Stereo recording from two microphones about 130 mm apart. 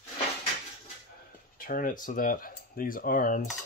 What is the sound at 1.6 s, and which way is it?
Speech, 90° left.